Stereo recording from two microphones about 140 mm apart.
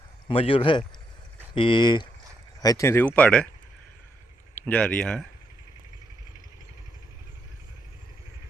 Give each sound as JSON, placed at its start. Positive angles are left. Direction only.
{"t": 0.3, "sound": "speech", "side_deg": 40}
{"t": 4.5, "sound": "speech", "side_deg": 10}